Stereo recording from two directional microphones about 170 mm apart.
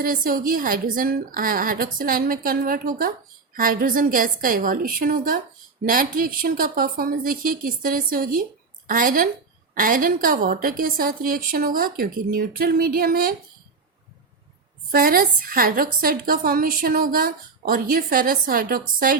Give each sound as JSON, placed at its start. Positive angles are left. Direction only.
{"t": 0.0, "sound": "a woman's voice", "side_deg": -55}
{"t": 14.8, "sound": "a woman's voice", "side_deg": -55}